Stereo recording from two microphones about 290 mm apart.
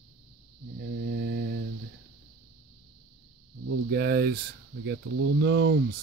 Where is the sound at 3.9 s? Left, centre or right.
Right.